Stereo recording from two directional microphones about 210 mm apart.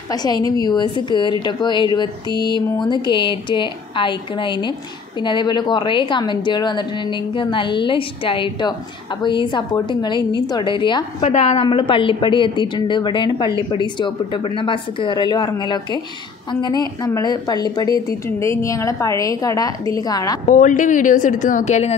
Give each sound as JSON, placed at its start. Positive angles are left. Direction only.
{"t": 0.1, "sound": "a woman's voice", "side_deg": 20}
{"t": 17.0, "sound": "a woman's voice", "side_deg": 20}
{"t": 20.4, "sound": "a woman's voice", "side_deg": 40}